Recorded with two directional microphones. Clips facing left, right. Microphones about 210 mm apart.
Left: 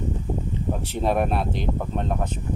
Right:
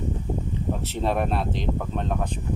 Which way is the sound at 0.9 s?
10° left (ahead or behind).